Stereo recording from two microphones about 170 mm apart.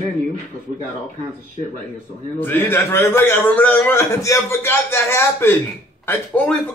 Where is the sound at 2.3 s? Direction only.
10° left (ahead or behind).